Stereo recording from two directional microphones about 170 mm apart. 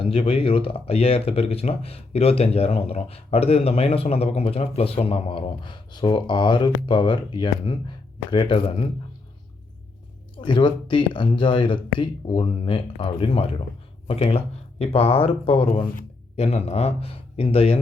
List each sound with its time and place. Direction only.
0.0 s speech: 35° left (ahead or behind)
10.4 s speech: 30° left (ahead or behind)